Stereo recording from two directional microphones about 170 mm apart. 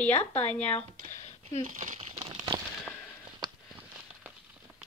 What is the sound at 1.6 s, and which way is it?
Speech, 50° right (ahead or behind).